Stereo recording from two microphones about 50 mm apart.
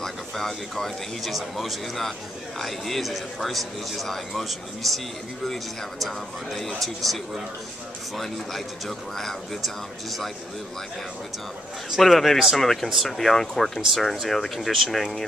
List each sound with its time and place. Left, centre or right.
0.0 s a man's voice: centre
12.0 s a man's voice: centre